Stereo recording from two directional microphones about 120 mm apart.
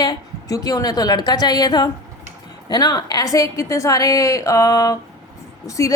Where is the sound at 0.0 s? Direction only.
30° left (ahead or behind).